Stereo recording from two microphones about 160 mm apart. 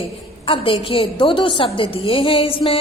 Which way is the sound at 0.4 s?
35° left (ahead or behind).